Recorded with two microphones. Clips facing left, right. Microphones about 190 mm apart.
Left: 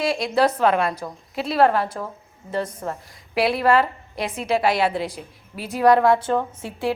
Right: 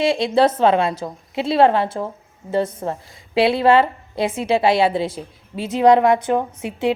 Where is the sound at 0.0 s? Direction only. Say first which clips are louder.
Right 4 dB; 25° right (ahead or behind).